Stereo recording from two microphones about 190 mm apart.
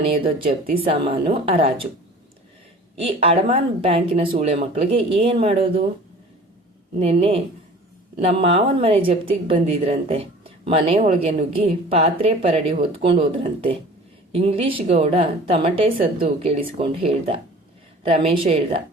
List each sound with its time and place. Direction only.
0.2 s a woman's voice: 30° right (ahead or behind)
2.9 s a woman's voice: 30° right (ahead or behind)
6.9 s a woman's voice: 30° right (ahead or behind)